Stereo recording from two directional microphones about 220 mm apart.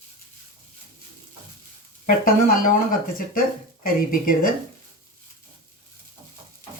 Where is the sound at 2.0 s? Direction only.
40° left (ahead or behind).